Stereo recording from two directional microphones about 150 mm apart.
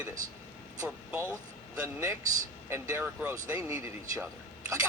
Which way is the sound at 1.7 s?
15° right (ahead or behind).